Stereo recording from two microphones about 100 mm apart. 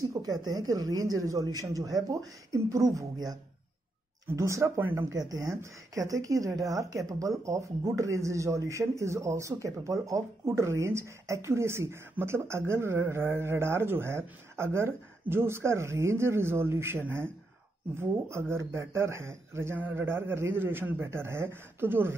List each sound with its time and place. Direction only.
0.1 s speech: 40° right (ahead or behind); by 5.0 s 20° right (ahead or behind)
5.1 s speech: 35° right (ahead or behind); by 22.1 s 20° right (ahead or behind)